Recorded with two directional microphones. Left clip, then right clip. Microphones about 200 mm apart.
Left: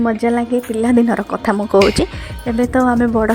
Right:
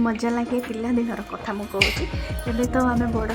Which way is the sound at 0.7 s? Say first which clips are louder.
Left 11 dB; 35° left (ahead or behind).